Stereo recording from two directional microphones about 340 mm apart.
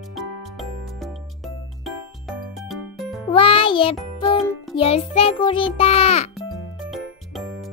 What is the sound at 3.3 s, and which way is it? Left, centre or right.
Music, centre.